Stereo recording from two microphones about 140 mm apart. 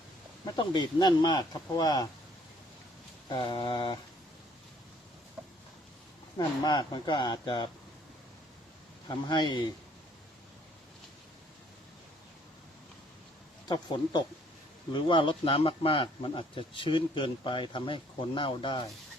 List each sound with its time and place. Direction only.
0.4 s speech: 30° left (ahead or behind)
3.2 s speech: 35° left (ahead or behind)
6.3 s speech: 30° left (ahead or behind)
9.0 s speech: 30° left (ahead or behind)
13.7 s a man's voice: 30° left (ahead or behind)